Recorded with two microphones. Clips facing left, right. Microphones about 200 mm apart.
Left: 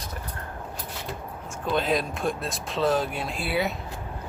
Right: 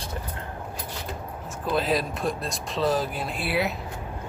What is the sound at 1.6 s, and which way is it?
Speech, centre (ahead or behind).